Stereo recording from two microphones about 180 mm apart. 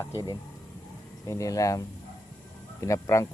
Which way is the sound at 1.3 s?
20° left (ahead or behind).